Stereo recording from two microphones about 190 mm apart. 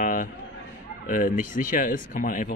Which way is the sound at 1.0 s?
45° left (ahead or behind).